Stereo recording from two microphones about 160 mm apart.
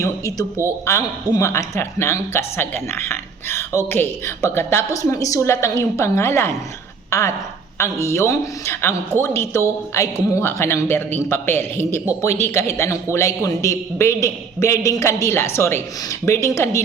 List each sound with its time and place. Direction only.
0.0 s a woman's voice: 20° left (ahead or behind)